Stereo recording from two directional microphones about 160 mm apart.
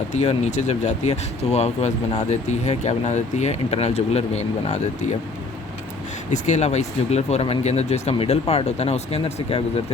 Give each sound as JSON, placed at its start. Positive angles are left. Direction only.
{"t": 0.1, "sound": "speech", "side_deg": 45}
{"t": 6.3, "sound": "speech", "side_deg": 45}